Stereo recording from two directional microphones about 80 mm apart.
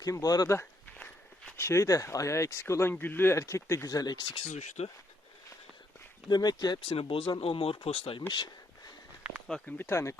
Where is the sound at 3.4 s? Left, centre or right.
Left.